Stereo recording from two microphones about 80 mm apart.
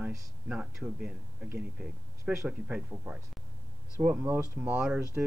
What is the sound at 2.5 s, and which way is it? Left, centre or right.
Speech, centre.